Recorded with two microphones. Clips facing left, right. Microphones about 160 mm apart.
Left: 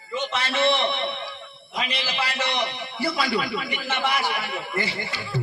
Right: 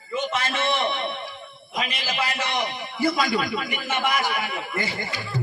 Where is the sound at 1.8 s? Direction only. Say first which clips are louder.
Right 1 dB; 45° right (ahead or behind).